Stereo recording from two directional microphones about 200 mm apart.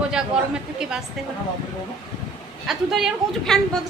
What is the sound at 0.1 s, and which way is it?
Speech, 5° right (ahead or behind).